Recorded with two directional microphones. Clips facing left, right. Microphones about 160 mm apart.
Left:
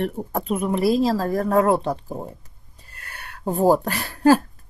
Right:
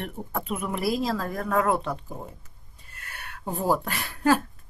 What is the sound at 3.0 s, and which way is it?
Speech, 35° left (ahead or behind).